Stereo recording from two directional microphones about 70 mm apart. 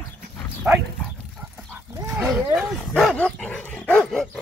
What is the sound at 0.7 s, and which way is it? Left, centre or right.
Speech, right.